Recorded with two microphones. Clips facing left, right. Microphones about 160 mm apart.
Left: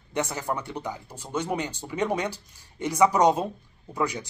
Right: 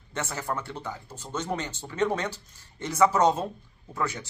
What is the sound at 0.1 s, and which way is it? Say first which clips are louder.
Speech: left 3 dB; 15° left (ahead or behind).